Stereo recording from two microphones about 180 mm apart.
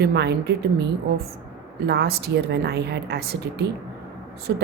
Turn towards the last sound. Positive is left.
turn(degrees=-65)  # may be behind; listen again after turning